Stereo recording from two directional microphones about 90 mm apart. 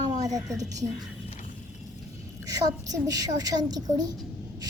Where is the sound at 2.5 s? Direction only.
45° right (ahead or behind).